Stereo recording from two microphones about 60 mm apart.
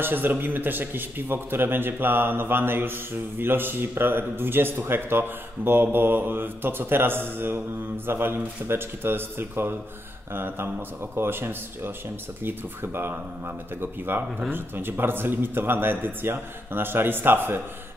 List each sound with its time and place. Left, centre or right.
0.0 s a man's voice: right